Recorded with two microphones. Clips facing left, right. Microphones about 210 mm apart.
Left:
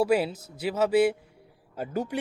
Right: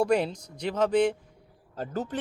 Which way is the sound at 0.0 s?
5° left (ahead or behind).